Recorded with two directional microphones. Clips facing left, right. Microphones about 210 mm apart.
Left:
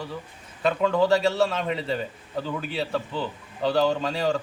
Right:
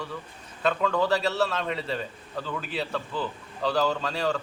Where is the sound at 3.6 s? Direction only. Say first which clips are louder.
Left 3 dB; 25° left (ahead or behind).